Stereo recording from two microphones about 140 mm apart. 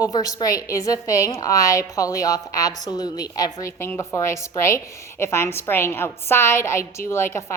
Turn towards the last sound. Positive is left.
turn(degrees=20)  # may be behind; listen again after turning